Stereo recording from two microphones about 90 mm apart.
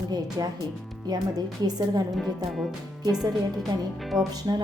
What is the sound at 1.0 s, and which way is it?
A woman's voice, 50° right (ahead or behind).